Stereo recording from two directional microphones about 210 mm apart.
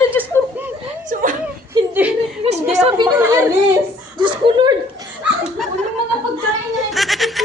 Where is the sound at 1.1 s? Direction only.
40° right (ahead or behind).